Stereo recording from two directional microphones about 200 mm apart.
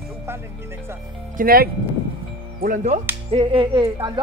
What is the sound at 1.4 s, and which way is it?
Speech, 45° right (ahead or behind).